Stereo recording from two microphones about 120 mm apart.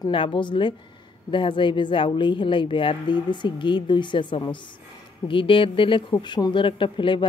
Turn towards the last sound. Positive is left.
turn(degrees=45)  # may be behind; listen again after turning